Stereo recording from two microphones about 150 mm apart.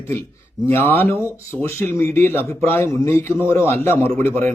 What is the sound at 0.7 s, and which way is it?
Speech, 15° left (ahead or behind).